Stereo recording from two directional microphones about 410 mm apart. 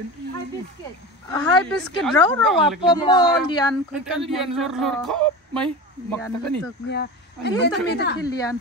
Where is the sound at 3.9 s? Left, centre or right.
Centre.